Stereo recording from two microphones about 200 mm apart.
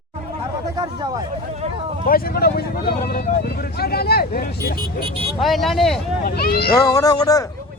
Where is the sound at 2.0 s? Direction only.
45° left (ahead or behind).